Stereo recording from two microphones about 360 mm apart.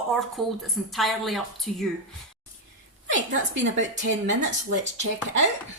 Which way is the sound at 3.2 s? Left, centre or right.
Right.